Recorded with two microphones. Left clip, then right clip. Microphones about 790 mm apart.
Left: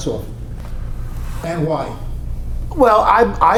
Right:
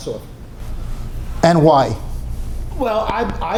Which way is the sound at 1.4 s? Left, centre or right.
Right.